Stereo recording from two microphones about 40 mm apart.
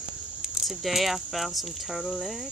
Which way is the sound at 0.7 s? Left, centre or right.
Centre.